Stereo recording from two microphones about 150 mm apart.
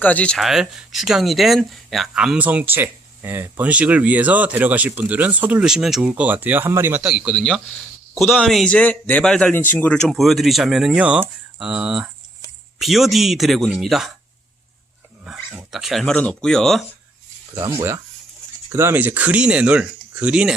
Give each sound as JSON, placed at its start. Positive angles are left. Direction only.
{"t": 0.0, "sound": "speech", "side_deg": 10}
{"t": 7.1, "sound": "a man's voice", "side_deg": 0}
{"t": 15.2, "sound": "speech", "side_deg": -5}
{"t": 17.5, "sound": "speech", "side_deg": -15}